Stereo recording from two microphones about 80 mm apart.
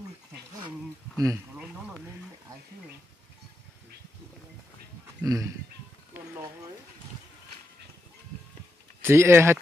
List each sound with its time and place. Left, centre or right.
1.1 s speech: right
5.2 s speech: right
9.0 s speech: right